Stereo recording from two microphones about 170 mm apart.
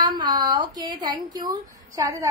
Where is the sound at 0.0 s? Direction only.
25° right (ahead or behind).